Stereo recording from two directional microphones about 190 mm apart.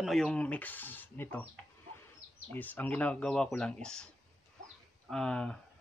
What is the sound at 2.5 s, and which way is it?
Speech, 10° left (ahead or behind).